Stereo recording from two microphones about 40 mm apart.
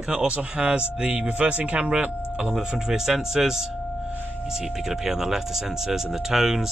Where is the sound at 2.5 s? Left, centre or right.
Centre.